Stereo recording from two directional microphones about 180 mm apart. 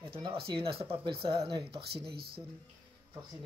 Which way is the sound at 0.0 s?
30° right (ahead or behind).